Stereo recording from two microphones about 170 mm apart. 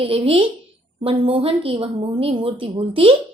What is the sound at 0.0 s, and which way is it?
A woman's voice, 35° right (ahead or behind).